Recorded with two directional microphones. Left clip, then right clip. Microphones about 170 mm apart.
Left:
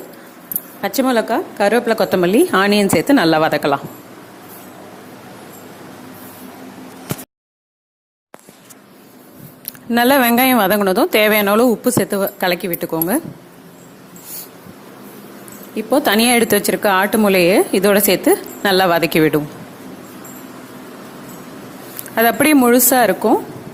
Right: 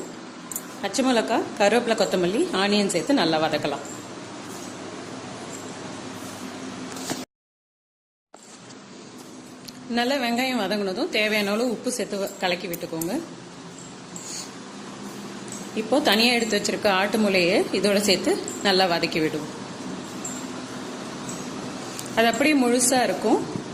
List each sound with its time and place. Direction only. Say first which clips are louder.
0.8 s a woman's voice: left 6 dB; 40° left (ahead or behind)
9.9 s a woman's voice: left 11 dB; 60° left (ahead or behind)
15.7 s a woman's voice: left 6 dB; 50° left (ahead or behind)
22.1 s a woman's voice: left 7 dB; 55° left (ahead or behind)